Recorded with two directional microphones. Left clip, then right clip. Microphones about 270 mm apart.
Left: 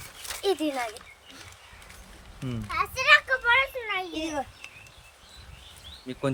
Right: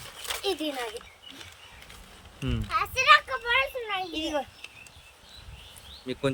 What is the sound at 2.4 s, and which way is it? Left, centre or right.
Speech, centre.